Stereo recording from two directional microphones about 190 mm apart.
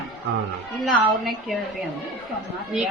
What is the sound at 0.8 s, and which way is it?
Speech, centre (ahead or behind).